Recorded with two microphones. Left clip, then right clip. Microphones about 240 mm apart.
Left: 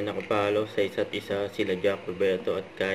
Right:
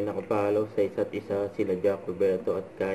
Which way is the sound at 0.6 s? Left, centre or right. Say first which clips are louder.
Even; centre.